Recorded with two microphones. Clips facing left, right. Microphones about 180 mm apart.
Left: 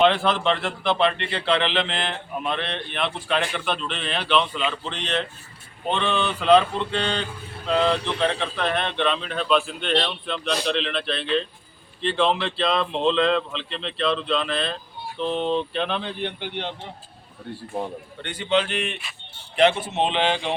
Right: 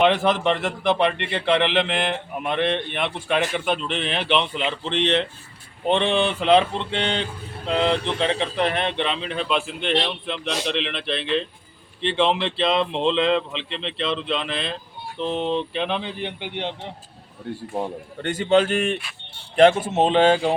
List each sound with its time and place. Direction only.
0.0 s speech: 15° right (ahead or behind)
4.1 s a sound: 20° right (ahead or behind)
7.7 s speech: 25° right (ahead or behind)
10.5 s a sound: 20° right (ahead or behind)
12.0 s speech: 20° right (ahead or behind)
18.2 s speech: 45° right (ahead or behind)